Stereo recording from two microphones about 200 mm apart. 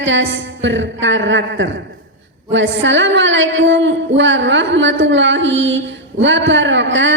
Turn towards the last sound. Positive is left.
turn(degrees=-65)  # may be behind; listen again after turning